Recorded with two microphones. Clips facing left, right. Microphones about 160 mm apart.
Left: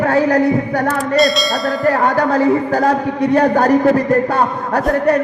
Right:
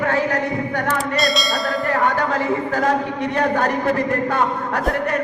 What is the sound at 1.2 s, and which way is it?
Bell, centre (ahead or behind).